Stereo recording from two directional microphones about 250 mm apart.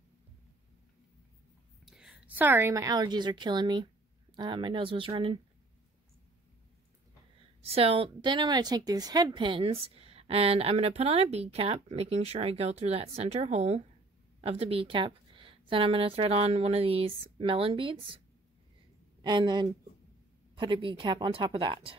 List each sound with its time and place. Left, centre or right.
1.9 s a woman's voice: centre; by 5.4 s right
7.6 s a woman's voice: right
19.2 s a woman's voice: centre